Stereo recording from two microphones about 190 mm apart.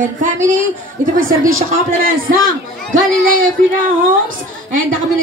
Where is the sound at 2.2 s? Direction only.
90° right.